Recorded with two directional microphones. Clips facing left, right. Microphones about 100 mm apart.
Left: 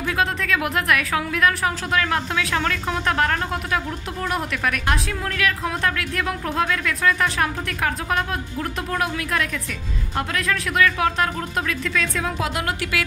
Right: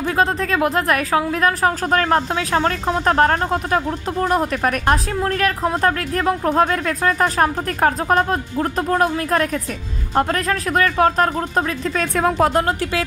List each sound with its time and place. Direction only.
0.2 s a woman's voice: 35° right (ahead or behind)
12.2 s a woman's voice: 50° right (ahead or behind)